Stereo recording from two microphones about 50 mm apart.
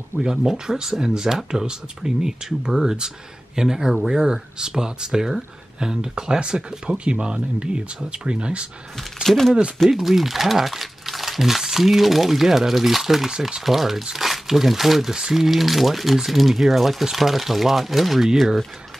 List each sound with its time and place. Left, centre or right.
0.4 s speech: centre
8.9 s speech: centre